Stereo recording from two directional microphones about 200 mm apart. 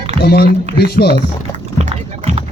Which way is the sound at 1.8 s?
30° right (ahead or behind).